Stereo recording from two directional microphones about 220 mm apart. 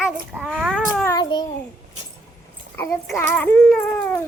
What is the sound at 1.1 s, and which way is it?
Speech, 20° left (ahead or behind).